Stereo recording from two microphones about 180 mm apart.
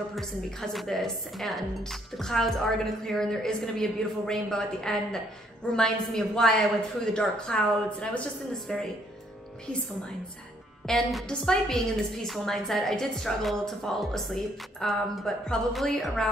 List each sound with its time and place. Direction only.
0.1 s a woman's voice: centre (ahead or behind)
10.9 s a woman's voice: centre (ahead or behind)